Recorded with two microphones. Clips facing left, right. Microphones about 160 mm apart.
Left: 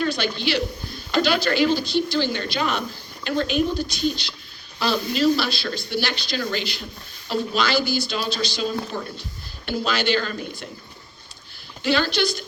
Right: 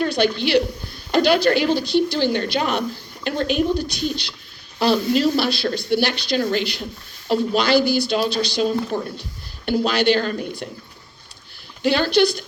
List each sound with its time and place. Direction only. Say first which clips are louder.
0.0 s a woman's voice: right 4 dB; 60° right (ahead or behind)
8.9 s speech: right 6 dB; 20° right (ahead or behind)
9.6 s speech: right 5 dB; 60° right (ahead or behind)
11.8 s speech: right 5 dB; 60° right (ahead or behind)